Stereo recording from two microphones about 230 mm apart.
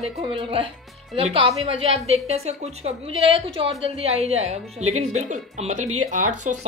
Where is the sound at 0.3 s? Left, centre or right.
Right.